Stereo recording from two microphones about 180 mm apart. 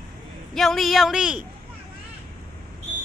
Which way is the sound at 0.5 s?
Centre (ahead or behind).